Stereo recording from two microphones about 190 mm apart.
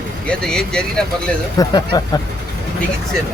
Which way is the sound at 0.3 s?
5° left (ahead or behind).